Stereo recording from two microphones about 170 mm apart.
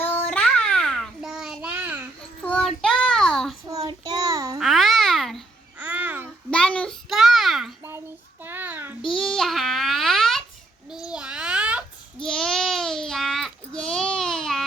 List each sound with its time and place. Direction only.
0.0 s child singing: 10° left (ahead or behind); by 2.0 s 10° right (ahead or behind)
2.4 s child singing: 5° left (ahead or behind)
3.7 s child singing: 25° right (ahead or behind)
4.6 s babbling: centre (ahead or behind)
5.8 s babbling: 10° right (ahead or behind)
6.5 s a sound: 5° left (ahead or behind)
8.4 s a sound: 10° right (ahead or behind)
9.0 s babbling: centre (ahead or behind)